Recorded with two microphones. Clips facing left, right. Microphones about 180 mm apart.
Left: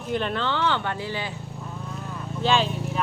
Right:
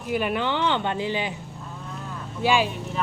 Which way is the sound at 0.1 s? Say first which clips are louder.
Right 2 dB; 10° right (ahead or behind).